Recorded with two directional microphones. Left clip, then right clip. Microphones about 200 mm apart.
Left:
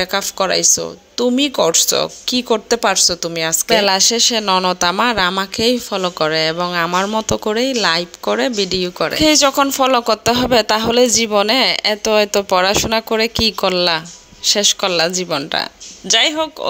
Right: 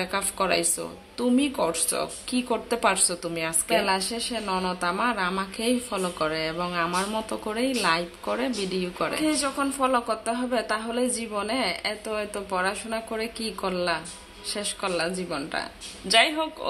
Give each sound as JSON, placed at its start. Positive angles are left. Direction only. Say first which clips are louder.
{"t": 0.0, "sound": "speech", "louder": "left 9 dB", "side_deg": 35}